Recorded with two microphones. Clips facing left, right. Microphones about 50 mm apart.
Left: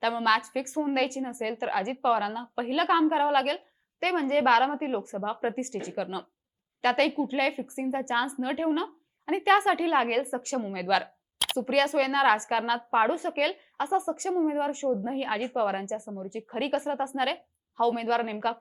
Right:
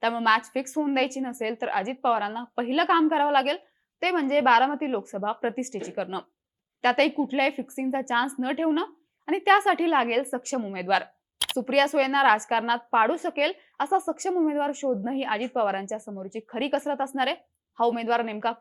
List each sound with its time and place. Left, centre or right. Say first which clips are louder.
0.0 s a woman's voice: right 2 dB; right